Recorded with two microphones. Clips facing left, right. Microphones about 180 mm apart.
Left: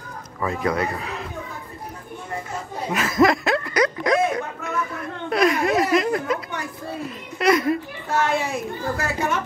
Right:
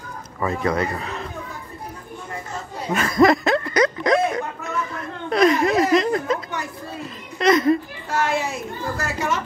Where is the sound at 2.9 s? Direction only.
Centre (ahead or behind).